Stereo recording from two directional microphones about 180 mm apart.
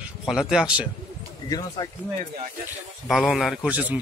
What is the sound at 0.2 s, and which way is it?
Speech, 5° right (ahead or behind).